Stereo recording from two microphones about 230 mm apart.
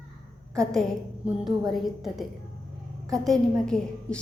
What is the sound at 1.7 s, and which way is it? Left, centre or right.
A woman's voice, centre.